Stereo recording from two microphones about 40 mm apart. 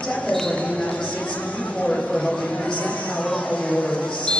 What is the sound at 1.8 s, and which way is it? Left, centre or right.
Speech, centre.